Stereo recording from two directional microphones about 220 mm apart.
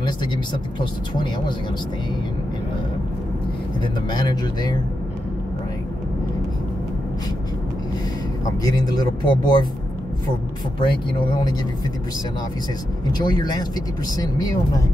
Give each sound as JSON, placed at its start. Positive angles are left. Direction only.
{"t": 0.7, "sound": "speech", "side_deg": 20}
{"t": 3.8, "sound": "speech", "side_deg": 20}
{"t": 8.5, "sound": "speech", "side_deg": 15}
{"t": 10.8, "sound": "speech", "side_deg": 20}
{"t": 13.2, "sound": "speech", "side_deg": 20}